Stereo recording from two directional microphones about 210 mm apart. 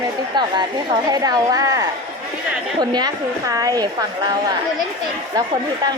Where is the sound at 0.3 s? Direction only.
20° right (ahead or behind).